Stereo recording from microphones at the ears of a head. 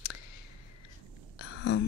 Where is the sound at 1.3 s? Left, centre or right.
Left.